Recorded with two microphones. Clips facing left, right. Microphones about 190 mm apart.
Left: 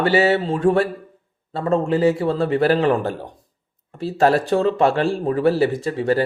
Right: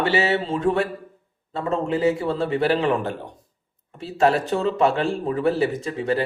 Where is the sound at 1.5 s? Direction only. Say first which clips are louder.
Left 4 dB; 35° left (ahead or behind).